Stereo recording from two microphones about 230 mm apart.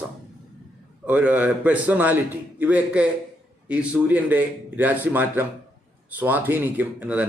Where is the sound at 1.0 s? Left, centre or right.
Centre.